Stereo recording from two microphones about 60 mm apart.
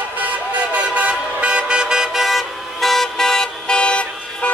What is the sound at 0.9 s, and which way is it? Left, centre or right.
Vehicle, right.